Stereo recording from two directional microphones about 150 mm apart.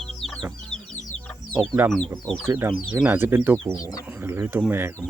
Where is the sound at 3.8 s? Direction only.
25° left (ahead or behind).